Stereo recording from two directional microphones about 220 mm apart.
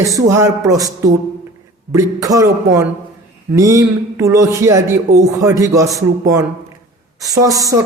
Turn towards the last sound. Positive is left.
turn(degrees=-15)  # may be behind; listen again after turning